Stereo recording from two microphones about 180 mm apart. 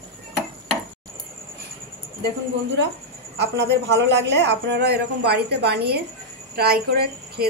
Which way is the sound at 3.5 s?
70° right (ahead or behind).